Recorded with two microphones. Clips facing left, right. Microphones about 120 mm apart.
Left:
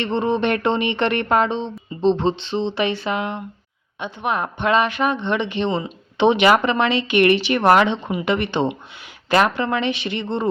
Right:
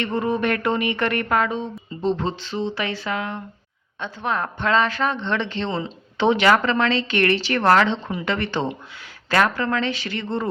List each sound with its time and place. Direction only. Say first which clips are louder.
0.0 s speech: left 2 dB; 25° left (ahead or behind)